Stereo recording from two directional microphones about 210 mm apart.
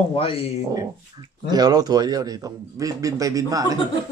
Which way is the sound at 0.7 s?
20° right (ahead or behind).